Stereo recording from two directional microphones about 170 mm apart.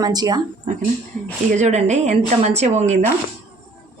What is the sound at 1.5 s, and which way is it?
A woman's voice, 40° right (ahead or behind).